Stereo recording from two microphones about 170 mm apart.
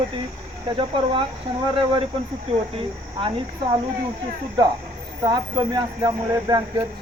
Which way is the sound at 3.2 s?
30° right (ahead or behind).